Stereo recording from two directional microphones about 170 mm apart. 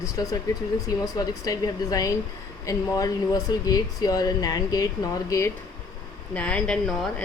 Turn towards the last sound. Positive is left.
turn(degrees=5)  # may be behind; listen again after turning